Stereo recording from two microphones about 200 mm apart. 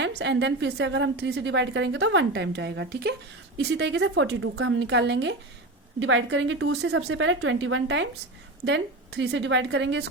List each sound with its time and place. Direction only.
0.0 s a woman's voice: 60° right (ahead or behind)